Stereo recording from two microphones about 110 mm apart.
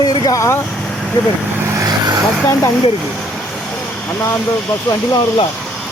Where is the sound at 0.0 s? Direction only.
35° left (ahead or behind).